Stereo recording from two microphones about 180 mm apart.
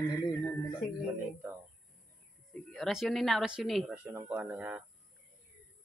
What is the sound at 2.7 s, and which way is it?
Speech, centre (ahead or behind).